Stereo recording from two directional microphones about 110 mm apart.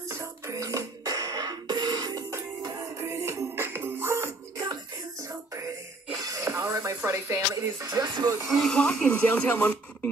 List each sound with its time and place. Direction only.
0.1 s music: 30° right (ahead or behind)
2.3 s music: 25° right (ahead or behind)
6.2 s a sound: 30° right (ahead or behind)
7.1 s speech: 30° right (ahead or behind)
7.8 s speech: 35° right (ahead or behind)
8.5 s speech: 5° left (ahead or behind)